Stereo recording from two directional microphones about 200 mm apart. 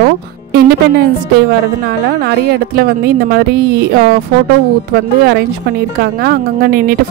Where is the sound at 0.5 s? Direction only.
50° right (ahead or behind).